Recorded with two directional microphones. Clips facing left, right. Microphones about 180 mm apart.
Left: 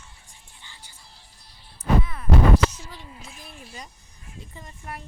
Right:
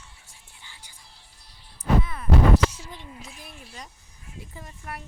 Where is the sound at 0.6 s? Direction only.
10° right (ahead or behind).